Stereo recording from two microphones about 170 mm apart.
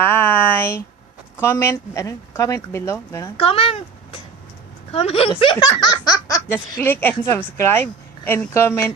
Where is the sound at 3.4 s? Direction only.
35° left (ahead or behind).